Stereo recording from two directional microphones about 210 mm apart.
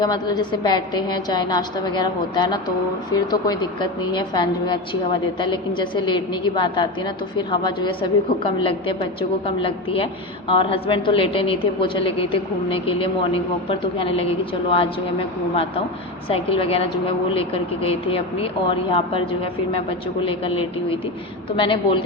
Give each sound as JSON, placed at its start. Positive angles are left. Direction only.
{"t": 0.0, "sound": "a woman's voice", "side_deg": 20}
{"t": 16.3, "sound": "a woman's voice", "side_deg": 25}